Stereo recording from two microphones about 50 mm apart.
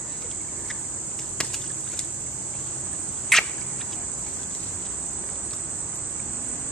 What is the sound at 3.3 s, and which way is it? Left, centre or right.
Cricket, centre.